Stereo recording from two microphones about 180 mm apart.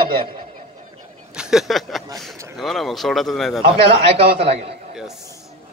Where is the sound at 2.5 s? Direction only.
Centre (ahead or behind).